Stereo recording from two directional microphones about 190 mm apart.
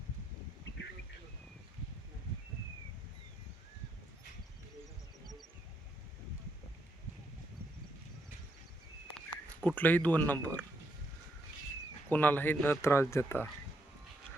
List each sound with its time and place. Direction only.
9.1 s speech: 5° left (ahead or behind)
12.0 s speech: 10° left (ahead or behind)